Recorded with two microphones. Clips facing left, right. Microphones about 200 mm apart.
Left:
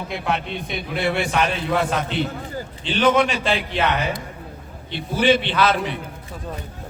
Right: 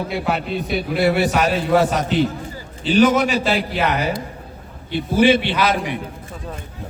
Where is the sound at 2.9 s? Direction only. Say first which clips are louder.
Right 9 dB; 5° right (ahead or behind).